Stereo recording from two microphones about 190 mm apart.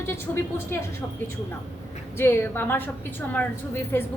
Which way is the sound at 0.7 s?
15° left (ahead or behind).